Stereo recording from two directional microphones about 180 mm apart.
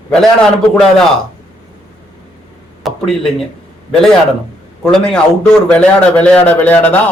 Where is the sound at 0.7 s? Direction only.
5° left (ahead or behind).